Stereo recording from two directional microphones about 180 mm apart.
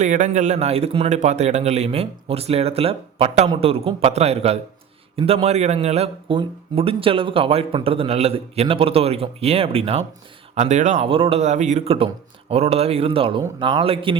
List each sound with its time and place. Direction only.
0.0 s a man's voice: 45° right (ahead or behind)